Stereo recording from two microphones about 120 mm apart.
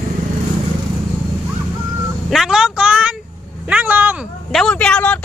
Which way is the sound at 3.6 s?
15° right (ahead or behind).